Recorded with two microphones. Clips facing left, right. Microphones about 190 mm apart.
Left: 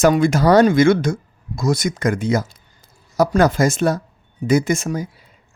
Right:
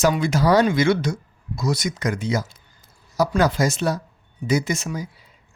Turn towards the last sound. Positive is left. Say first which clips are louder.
# left 5 dB
turn(degrees=50)  # may be behind; listen again after turning